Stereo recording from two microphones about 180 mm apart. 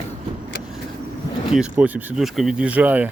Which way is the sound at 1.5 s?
5° right (ahead or behind).